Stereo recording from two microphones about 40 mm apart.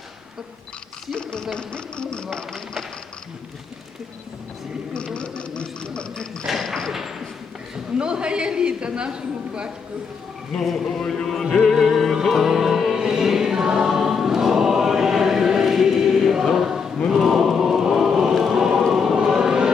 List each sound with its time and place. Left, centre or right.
1.1 s a sound: left
1.5 s speech: left
4.9 s sewing machine: left
6.4 s a sound: centre
7.9 s a woman's voice: right
10.6 s a sound: centre
11.7 s music: centre
13.0 s choir: centre
17.1 s chant: centre
18.5 s choir: centre